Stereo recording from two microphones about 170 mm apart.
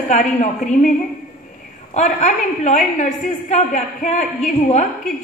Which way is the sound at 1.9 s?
45° left (ahead or behind).